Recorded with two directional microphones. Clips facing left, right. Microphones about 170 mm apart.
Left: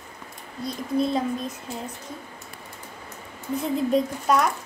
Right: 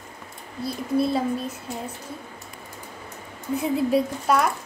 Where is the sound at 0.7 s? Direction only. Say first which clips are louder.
Right 1 dB; 5° right (ahead or behind).